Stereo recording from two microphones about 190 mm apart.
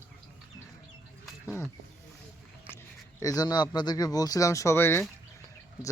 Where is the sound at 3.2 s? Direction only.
20° left (ahead or behind).